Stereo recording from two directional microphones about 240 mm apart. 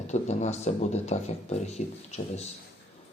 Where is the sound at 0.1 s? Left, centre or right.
Left.